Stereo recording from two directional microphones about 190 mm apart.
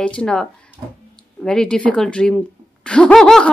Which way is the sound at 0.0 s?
5° left (ahead or behind).